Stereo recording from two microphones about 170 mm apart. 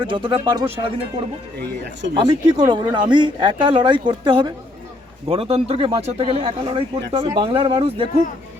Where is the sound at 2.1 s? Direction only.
30° right (ahead or behind).